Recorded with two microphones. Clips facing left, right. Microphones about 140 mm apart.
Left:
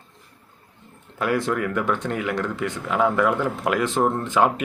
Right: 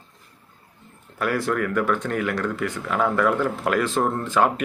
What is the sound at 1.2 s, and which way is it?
Speech, 20° left (ahead or behind).